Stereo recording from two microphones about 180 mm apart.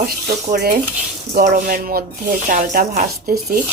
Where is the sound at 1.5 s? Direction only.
45° right (ahead or behind).